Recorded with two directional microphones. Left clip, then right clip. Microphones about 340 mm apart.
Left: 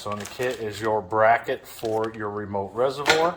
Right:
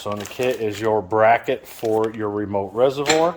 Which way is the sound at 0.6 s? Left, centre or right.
Right.